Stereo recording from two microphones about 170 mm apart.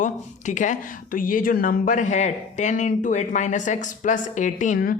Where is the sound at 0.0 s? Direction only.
45° left (ahead or behind).